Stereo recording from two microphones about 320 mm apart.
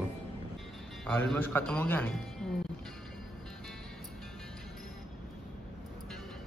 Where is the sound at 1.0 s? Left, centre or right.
Centre.